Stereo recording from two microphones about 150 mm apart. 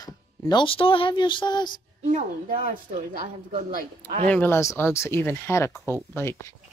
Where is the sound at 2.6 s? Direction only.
55° right (ahead or behind).